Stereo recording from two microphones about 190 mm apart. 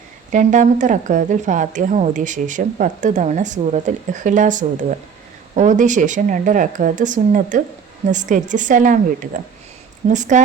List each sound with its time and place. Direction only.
0.3 s a woman's voice: 40° right (ahead or behind)